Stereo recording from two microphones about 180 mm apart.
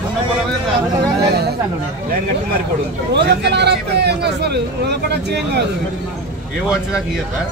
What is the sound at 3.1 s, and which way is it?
A man's voice, 70° right (ahead or behind).